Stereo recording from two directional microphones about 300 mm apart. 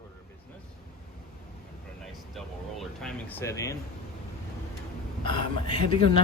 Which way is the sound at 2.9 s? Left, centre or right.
Centre.